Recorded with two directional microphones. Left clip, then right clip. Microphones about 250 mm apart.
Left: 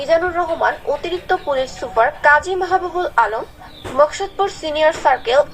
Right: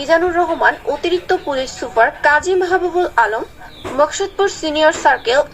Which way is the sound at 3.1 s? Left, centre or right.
Right.